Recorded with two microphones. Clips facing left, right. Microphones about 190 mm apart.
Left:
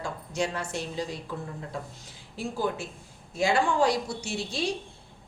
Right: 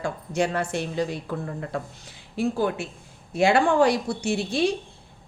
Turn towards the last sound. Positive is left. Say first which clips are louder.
# right 7 dB
turn(degrees=-60)  # may be behind; listen again after turning